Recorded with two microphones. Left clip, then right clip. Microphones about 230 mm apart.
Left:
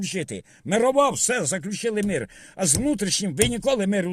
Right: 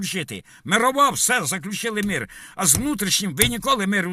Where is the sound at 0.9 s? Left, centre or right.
Right.